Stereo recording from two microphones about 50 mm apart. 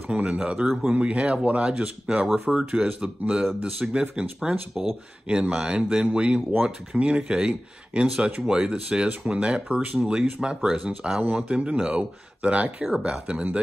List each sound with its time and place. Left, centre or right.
0.1 s speech: right